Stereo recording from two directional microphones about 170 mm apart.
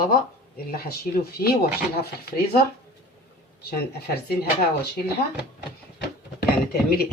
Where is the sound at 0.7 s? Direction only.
60° left (ahead or behind).